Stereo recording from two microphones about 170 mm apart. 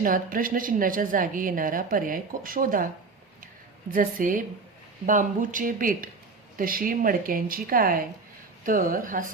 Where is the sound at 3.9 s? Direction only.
55° right (ahead or behind).